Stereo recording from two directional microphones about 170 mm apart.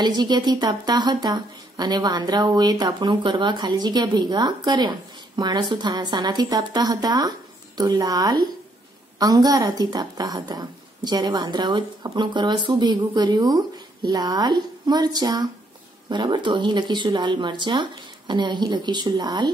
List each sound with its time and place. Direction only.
0.0 s a woman's voice: 25° right (ahead or behind)